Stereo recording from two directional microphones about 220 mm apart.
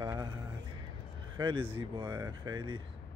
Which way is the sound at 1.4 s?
25° right (ahead or behind).